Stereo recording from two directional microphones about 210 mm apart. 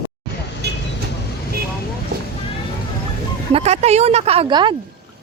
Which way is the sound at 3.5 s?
30° right (ahead or behind).